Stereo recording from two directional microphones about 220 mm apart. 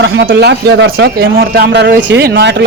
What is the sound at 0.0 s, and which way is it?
Speech, 55° right (ahead or behind).